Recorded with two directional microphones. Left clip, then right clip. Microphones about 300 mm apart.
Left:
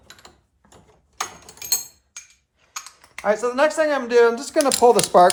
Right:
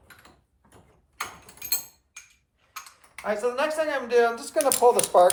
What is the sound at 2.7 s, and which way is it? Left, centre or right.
Speech, centre.